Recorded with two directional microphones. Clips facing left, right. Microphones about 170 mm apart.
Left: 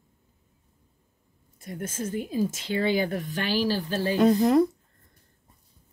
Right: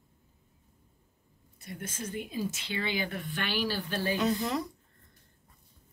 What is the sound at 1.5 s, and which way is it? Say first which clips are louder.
A woman's voice: left 7 dB; 45° left (ahead or behind).